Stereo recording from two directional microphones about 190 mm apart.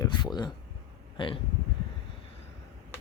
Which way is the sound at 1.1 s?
25° left (ahead or behind).